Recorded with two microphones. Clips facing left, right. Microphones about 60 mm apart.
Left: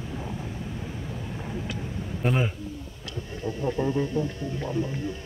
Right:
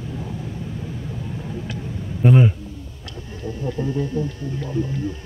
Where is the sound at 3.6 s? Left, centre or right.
Left.